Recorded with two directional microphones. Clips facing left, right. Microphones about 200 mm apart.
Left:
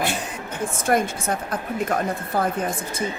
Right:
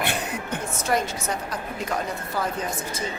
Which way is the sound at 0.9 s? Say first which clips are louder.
Left 4 dB; 55° left (ahead or behind).